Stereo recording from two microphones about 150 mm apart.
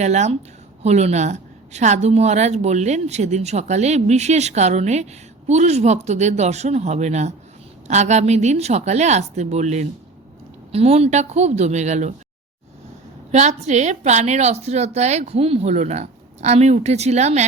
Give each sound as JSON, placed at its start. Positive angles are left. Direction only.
{"t": 0.0, "sound": "a woman's voice", "side_deg": -50}
{"t": 13.3, "sound": "a woman's voice", "side_deg": -50}